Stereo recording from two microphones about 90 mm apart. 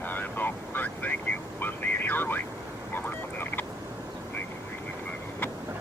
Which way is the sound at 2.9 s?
20° left (ahead or behind).